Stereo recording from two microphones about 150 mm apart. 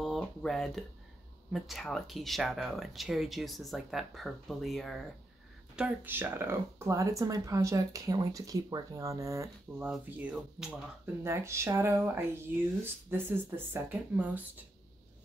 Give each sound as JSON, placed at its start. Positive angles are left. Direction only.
{"t": 0.0, "sound": "a sound", "side_deg": 5}
{"t": 1.5, "sound": "speech", "side_deg": 0}
{"t": 5.8, "sound": "speech", "side_deg": -15}
{"t": 9.8, "sound": "speech", "side_deg": -10}
{"t": 11.2, "sound": "speech", "side_deg": -20}